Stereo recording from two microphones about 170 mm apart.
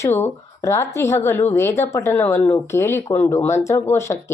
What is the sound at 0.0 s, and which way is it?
Speech, 15° left (ahead or behind).